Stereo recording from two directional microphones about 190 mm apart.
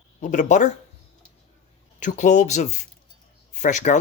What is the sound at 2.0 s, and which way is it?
Speech, 40° left (ahead or behind).